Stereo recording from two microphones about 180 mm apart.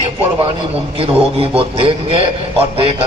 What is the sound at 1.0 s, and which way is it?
A man's voice, 30° right (ahead or behind).